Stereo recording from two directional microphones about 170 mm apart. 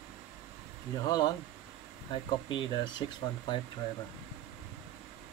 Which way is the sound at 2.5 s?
25° left (ahead or behind).